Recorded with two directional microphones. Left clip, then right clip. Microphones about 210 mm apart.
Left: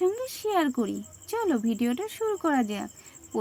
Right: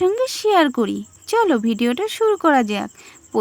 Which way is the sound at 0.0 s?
30° right (ahead or behind).